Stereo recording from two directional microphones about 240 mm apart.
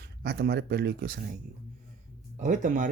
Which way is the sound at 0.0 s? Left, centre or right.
Right.